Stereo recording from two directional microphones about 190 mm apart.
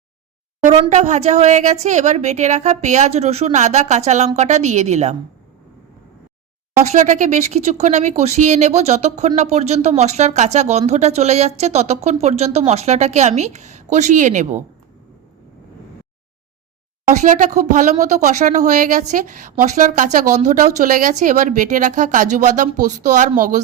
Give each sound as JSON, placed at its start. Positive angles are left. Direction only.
{"t": 0.6, "sound": "speech", "side_deg": -35}
{"t": 6.9, "sound": "speech", "side_deg": -40}
{"t": 17.1, "sound": "speech", "side_deg": -40}